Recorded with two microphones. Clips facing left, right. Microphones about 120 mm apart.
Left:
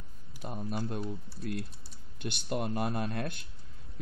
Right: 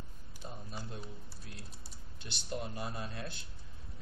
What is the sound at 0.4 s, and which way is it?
Speech, 65° left (ahead or behind).